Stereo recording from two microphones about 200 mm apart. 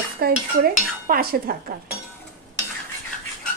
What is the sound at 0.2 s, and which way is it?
Speech, 50° right (ahead or behind).